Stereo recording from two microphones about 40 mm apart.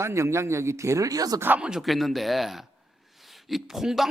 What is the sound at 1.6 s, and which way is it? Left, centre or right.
Speech, centre.